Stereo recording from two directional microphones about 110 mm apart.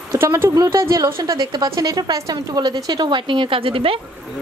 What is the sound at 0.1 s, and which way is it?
A woman's voice, 20° right (ahead or behind).